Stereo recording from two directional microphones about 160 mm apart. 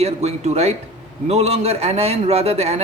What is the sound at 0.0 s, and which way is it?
A man's voice, 45° right (ahead or behind).